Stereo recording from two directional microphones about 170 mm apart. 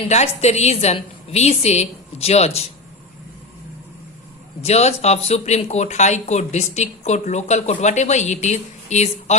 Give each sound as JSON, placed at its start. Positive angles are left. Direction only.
{"t": 0.0, "sound": "speech", "side_deg": 40}
{"t": 4.6, "sound": "speech", "side_deg": 40}